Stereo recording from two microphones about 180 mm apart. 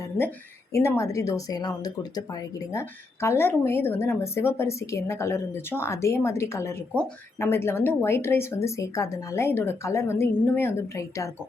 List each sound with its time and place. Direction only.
0.7 s speech: 15° left (ahead or behind)